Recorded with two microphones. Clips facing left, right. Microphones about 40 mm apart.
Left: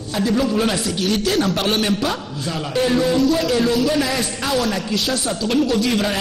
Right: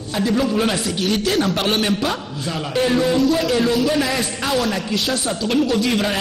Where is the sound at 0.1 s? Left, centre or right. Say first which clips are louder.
Even; right.